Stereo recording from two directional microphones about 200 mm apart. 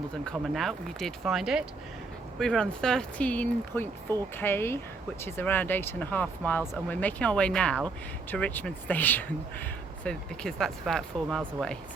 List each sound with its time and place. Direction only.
0.3 s speech: centre (ahead or behind)